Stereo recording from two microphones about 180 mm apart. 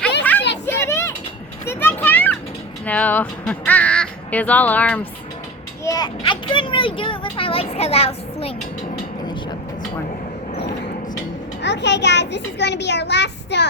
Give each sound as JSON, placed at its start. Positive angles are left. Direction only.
{"t": 0.6, "sound": "a sound", "side_deg": 15}
{"t": 2.8, "sound": "speech", "side_deg": 10}
{"t": 5.8, "sound": "a child's voice", "side_deg": 20}
{"t": 11.6, "sound": "a child's voice", "side_deg": 75}